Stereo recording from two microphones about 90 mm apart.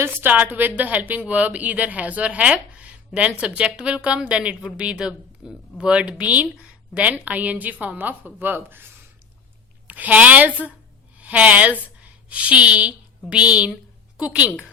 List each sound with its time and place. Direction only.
0.0 s a woman's voice: 20° right (ahead or behind)
9.8 s a woman's voice: 20° right (ahead or behind)